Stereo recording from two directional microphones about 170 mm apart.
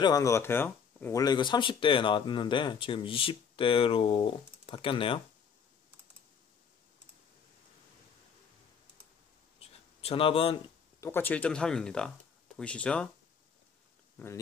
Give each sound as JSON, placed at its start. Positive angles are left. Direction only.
{"t": 0.0, "sound": "speech", "side_deg": 20}
{"t": 1.2, "sound": "speech", "side_deg": 25}
{"t": 9.6, "sound": "a sound", "side_deg": 35}
{"t": 11.0, "sound": "speech", "side_deg": 15}
{"t": 14.1, "sound": "speech", "side_deg": 15}